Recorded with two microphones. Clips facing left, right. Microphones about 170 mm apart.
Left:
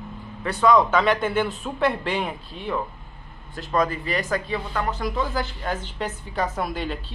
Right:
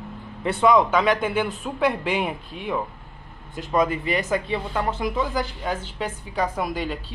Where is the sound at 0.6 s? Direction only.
15° right (ahead or behind).